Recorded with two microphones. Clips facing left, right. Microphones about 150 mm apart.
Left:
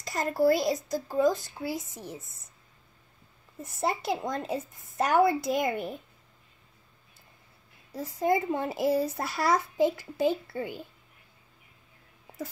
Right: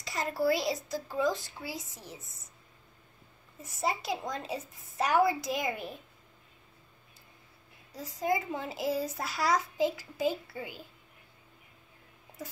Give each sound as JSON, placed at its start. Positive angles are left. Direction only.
{"t": 0.0, "sound": "a child's voice", "side_deg": 45}
{"t": 3.6, "sound": "a woman's voice", "side_deg": 55}
{"t": 7.9, "sound": "a child's voice", "side_deg": 60}